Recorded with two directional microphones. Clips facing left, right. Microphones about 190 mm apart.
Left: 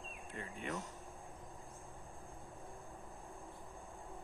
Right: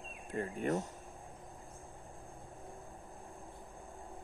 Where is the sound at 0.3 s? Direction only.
45° right (ahead or behind).